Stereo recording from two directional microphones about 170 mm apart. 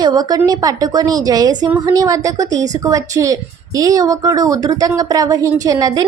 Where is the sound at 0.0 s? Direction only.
25° right (ahead or behind).